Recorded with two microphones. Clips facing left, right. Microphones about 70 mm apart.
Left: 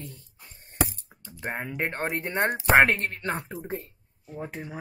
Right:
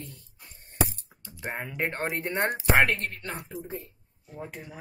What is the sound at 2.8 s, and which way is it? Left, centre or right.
Speech, left.